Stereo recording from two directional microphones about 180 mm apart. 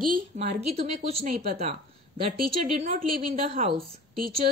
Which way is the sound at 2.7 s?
35° right (ahead or behind).